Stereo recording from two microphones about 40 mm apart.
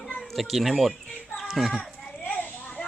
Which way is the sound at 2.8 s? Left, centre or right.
Left.